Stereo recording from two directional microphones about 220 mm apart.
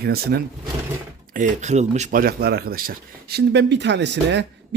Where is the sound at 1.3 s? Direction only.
35° right (ahead or behind).